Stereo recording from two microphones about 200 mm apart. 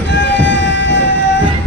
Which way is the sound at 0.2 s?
65° left (ahead or behind).